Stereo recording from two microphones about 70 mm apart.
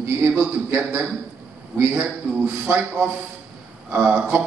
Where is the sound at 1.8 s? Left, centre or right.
Right.